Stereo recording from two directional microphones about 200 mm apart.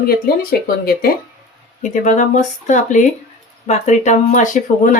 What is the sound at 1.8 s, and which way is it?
Speech, 40° left (ahead or behind).